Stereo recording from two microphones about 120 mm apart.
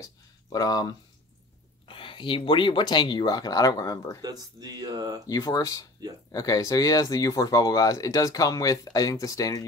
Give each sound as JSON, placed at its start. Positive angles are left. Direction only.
{"t": 0.0, "sound": "speech", "side_deg": 30}
{"t": 1.9, "sound": "speech", "side_deg": 45}
{"t": 4.2, "sound": "speech", "side_deg": -35}
{"t": 5.3, "sound": "speech", "side_deg": 30}